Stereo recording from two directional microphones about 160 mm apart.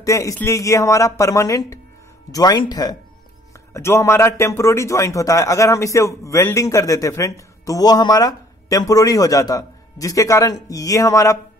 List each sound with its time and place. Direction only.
0.0 s a man's voice: 20° left (ahead or behind)